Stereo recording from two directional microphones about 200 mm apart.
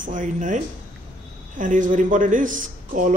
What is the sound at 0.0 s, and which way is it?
Speech, 40° right (ahead or behind).